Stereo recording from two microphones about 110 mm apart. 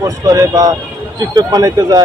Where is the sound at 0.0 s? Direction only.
35° right (ahead or behind).